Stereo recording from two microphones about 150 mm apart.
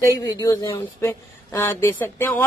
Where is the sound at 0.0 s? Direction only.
25° left (ahead or behind).